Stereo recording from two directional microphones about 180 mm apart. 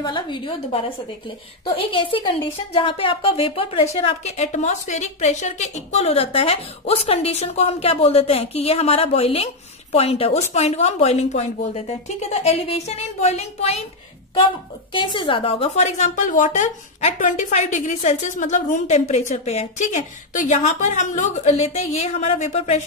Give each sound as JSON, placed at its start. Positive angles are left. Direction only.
{"t": 0.0, "sound": "a woman's voice", "side_deg": 25}
{"t": 14.9, "sound": "a woman's voice", "side_deg": 25}